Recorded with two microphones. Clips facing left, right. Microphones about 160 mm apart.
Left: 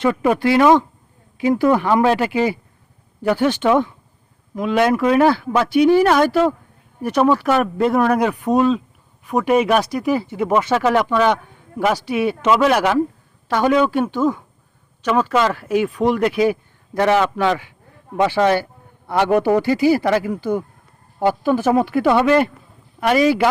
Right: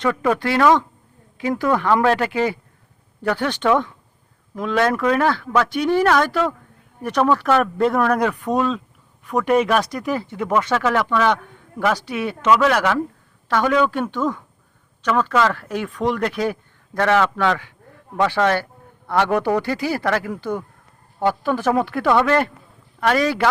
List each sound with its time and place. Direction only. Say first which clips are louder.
0.0 s speech: left 3 dB; 15° left (ahead or behind)